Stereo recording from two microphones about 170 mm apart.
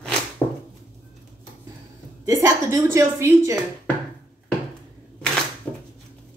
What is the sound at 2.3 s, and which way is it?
Speech, 15° right (ahead or behind).